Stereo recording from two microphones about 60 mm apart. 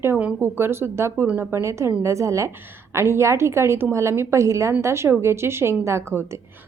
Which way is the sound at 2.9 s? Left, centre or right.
Right.